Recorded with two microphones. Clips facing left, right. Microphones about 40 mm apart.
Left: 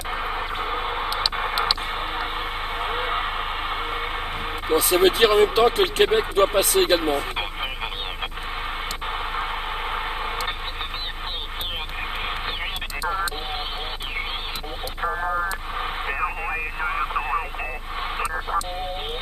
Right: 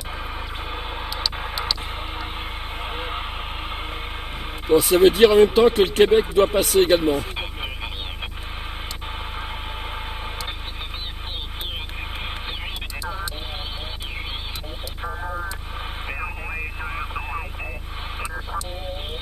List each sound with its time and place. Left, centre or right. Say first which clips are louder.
0.1 s radio: left 6 dB; left
0.7 s a sound: left 4 dB; centre
4.7 s speech: right 3 dB; centre
9.0 s radio: left 7 dB; left
15.0 s vehicle: left 6 dB; left
15.8 s radio: left 5 dB; left